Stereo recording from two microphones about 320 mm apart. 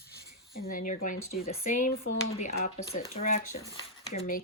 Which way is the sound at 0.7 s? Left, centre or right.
Left.